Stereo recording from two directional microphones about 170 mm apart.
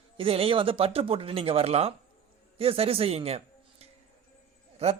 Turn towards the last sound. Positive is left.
turn(degrees=-40)  # may be behind; listen again after turning